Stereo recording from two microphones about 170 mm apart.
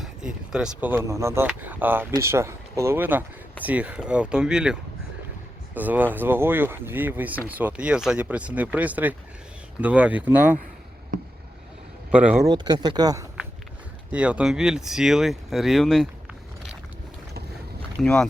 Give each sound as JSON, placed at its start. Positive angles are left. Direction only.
{"t": 0.0, "sound": "speech", "side_deg": -5}
{"t": 12.1, "sound": "speech", "side_deg": -5}
{"t": 12.4, "sound": "speech", "side_deg": -25}
{"t": 14.1, "sound": "speech", "side_deg": -5}
{"t": 18.0, "sound": "speech", "side_deg": 5}